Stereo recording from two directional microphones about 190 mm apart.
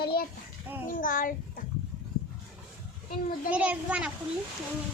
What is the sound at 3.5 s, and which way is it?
Speech, 5° right (ahead or behind).